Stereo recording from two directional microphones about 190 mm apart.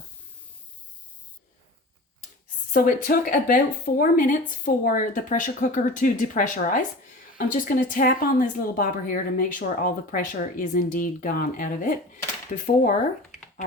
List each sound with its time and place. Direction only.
2.7 s speech: 50° left (ahead or behind)